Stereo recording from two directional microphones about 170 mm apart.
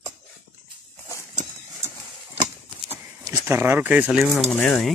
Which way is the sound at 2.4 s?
35° right (ahead or behind).